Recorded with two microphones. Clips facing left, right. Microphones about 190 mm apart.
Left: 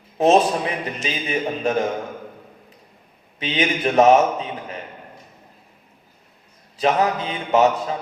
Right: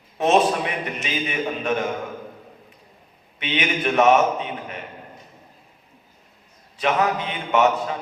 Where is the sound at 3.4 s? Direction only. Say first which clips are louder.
Left 2 dB; 35° left (ahead or behind).